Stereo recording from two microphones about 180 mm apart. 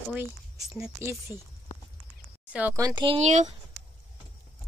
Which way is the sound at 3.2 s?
40° right (ahead or behind).